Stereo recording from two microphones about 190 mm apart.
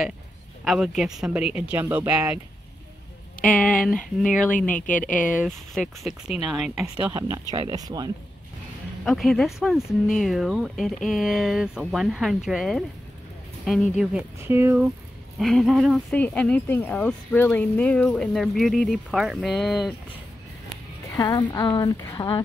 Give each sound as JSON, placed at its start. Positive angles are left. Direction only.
{"t": 0.7, "sound": "speech", "side_deg": 0}
{"t": 3.4, "sound": "speech", "side_deg": 5}
{"t": 5.1, "sound": "speech", "side_deg": 45}
{"t": 5.4, "sound": "speech", "side_deg": -5}
{"t": 7.1, "sound": "speech", "side_deg": -15}
{"t": 9.0, "sound": "speech", "side_deg": 0}
{"t": 15.3, "sound": "speech", "side_deg": 0}
{"t": 21.1, "sound": "a woman's voice", "side_deg": 20}